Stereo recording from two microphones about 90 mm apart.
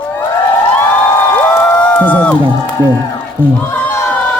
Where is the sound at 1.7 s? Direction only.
10° left (ahead or behind).